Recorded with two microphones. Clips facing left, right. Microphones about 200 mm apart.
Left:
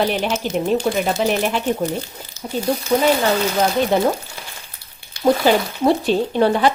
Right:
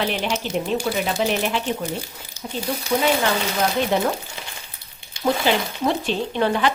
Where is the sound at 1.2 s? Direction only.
45° left (ahead or behind).